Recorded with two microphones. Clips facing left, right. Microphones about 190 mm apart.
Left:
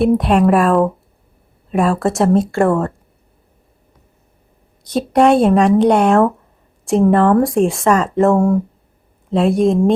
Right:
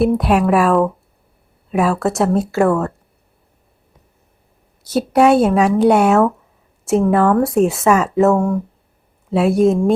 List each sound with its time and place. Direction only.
0.0 s speech: centre (ahead or behind)
4.8 s speech: 5° right (ahead or behind)